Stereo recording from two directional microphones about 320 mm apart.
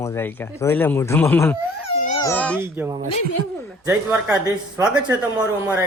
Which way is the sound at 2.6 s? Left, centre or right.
Centre.